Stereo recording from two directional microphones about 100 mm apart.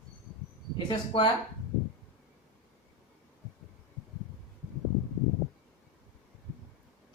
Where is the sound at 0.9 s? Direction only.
55° left (ahead or behind).